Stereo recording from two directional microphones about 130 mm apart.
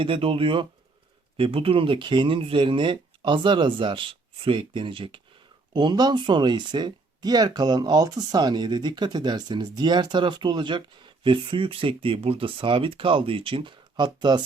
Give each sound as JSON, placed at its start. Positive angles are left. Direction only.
{"t": 0.0, "sound": "speech", "side_deg": -45}